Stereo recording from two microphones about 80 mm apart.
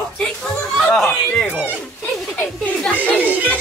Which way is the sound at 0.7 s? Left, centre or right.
Centre.